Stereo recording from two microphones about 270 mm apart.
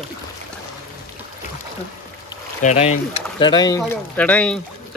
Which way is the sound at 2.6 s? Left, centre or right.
Left.